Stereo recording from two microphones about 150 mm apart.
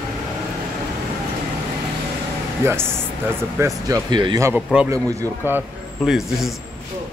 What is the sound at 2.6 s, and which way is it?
Speech, 15° right (ahead or behind).